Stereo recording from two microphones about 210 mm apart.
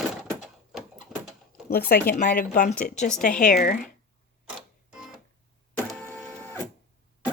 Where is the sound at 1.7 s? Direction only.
45° left (ahead or behind).